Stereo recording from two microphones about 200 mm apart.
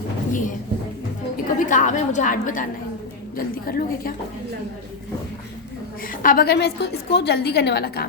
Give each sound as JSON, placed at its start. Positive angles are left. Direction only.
{"t": 0.3, "sound": "a sound", "side_deg": 40}
{"t": 1.5, "sound": "a woman's voice", "side_deg": 40}
{"t": 6.1, "sound": "a woman's voice", "side_deg": 45}